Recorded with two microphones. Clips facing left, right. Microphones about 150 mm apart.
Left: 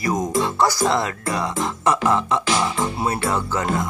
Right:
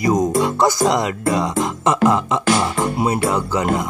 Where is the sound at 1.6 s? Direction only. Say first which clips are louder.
Right 2 dB; 20° right (ahead or behind).